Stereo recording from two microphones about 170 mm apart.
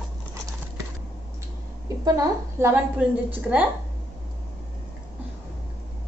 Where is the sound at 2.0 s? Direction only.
15° right (ahead or behind).